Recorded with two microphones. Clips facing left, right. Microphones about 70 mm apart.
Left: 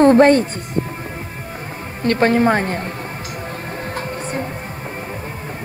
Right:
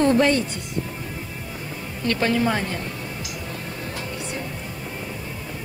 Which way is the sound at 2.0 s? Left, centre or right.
Left.